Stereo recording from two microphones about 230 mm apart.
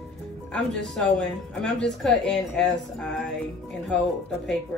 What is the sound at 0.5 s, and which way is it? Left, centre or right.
Speech, centre.